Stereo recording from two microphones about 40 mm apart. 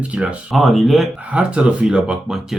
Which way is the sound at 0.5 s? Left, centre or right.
Centre.